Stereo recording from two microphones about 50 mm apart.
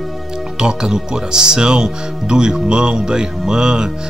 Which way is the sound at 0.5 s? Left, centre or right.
Centre.